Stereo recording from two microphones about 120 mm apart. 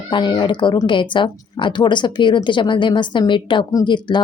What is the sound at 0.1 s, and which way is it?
Speech, 40° left (ahead or behind).